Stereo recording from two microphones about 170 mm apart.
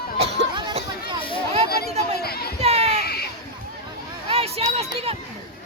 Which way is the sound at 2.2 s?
65° left (ahead or behind).